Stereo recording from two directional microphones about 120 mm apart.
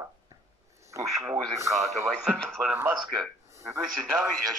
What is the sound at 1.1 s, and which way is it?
Speech, 5° right (ahead or behind).